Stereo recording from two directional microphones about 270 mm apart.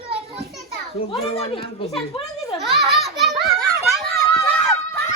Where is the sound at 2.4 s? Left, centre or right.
Centre.